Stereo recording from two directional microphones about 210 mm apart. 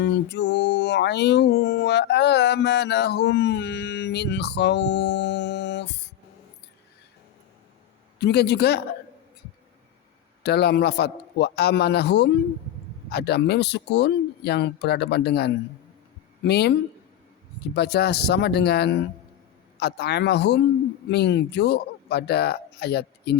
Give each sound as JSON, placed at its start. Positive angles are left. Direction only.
{"t": 0.0, "sound": "a sound", "side_deg": 55}
{"t": 8.2, "sound": "speech", "side_deg": 55}
{"t": 10.4, "sound": "speech", "side_deg": 50}
{"t": 17.7, "sound": "speech", "side_deg": 50}